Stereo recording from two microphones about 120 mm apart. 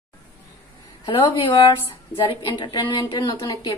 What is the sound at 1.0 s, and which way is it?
A woman's voice, 45° left (ahead or behind).